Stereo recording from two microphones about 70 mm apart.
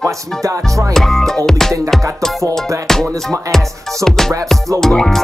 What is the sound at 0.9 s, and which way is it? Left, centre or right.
Speech, centre.